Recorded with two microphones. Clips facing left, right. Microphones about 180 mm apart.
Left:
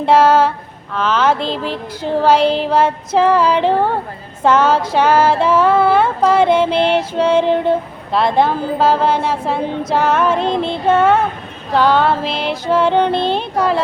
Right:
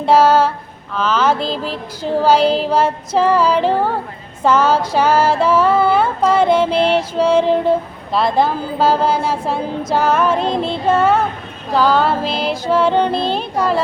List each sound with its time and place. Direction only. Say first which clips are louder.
0.0 s a sound: even; 5° right (ahead or behind)
0.9 s female singing: left 1 dB; 5° right (ahead or behind)
4.4 s music: left 1 dB; 5° right (ahead or behind)
5.6 s female singing: left 1 dB; centre (ahead or behind)